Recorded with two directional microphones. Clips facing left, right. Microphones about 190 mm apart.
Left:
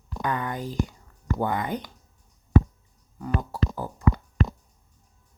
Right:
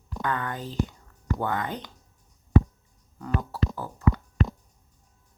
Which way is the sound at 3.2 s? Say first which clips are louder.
Left 1 dB; 15° left (ahead or behind).